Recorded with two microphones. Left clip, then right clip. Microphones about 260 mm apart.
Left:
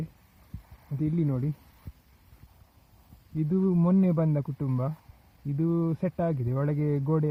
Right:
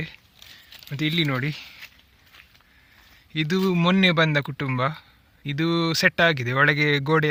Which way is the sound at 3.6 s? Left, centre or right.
Right.